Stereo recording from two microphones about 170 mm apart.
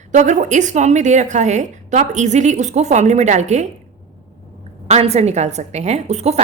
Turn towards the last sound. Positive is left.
turn(degrees=-40)  # may be behind; listen again after turning